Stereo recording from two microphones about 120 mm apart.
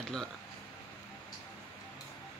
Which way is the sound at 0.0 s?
5° left (ahead or behind).